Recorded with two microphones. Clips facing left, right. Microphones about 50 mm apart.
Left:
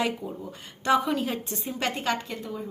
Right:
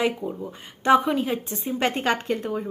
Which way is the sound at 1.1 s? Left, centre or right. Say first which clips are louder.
Right 3 dB; centre.